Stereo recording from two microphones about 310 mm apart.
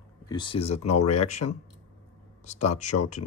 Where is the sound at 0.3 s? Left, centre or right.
Centre.